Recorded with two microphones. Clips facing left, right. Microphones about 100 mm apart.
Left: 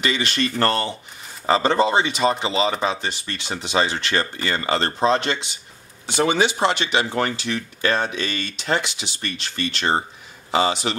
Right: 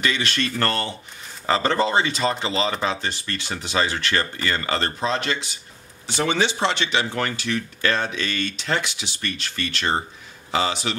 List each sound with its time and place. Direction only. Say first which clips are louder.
0.0 s speech: left 1 dB; 20° left (ahead or behind)
6.0 s speech: left 3 dB; 15° left (ahead or behind)
7.1 s speech: left 2 dB; 25° left (ahead or behind)